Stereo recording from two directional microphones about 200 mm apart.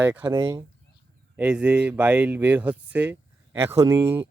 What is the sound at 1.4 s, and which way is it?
Speech, 5° right (ahead or behind).